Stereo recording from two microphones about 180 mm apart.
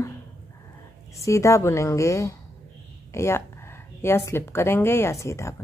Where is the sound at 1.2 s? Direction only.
15° left (ahead or behind).